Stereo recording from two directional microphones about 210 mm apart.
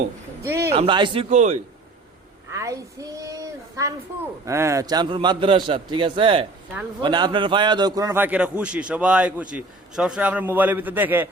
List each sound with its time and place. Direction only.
0.4 s a man's voice: 15° right (ahead or behind)
0.7 s a man's voice: 25° right (ahead or behind)
2.5 s a man's voice: 15° right (ahead or behind)